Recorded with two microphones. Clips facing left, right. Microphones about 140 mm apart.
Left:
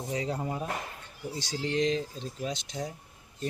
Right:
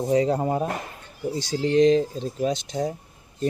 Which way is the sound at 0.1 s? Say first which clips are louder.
Right 11 dB; 40° right (ahead or behind).